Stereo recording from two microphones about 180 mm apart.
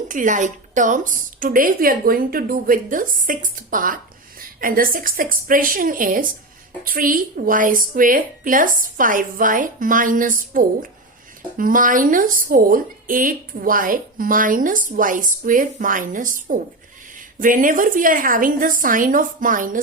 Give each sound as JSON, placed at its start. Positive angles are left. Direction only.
{"t": 0.1, "sound": "a woman's voice", "side_deg": -45}